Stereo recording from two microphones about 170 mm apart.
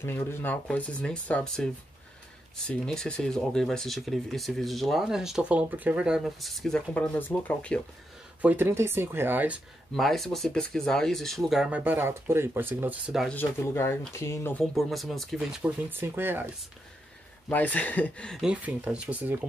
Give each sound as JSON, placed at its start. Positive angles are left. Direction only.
{"t": 0.0, "sound": "speech", "side_deg": 15}
{"t": 8.4, "sound": "speech", "side_deg": -10}
{"t": 9.9, "sound": "speech", "side_deg": 0}
{"t": 13.3, "sound": "speech", "side_deg": 15}
{"t": 14.6, "sound": "speech", "side_deg": 0}
{"t": 17.5, "sound": "speech", "side_deg": 10}